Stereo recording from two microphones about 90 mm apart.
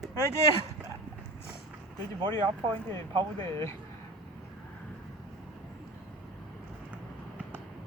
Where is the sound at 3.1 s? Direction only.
65° right (ahead or behind).